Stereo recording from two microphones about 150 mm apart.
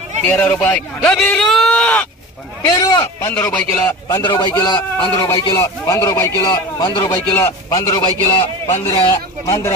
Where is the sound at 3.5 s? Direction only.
10° left (ahead or behind).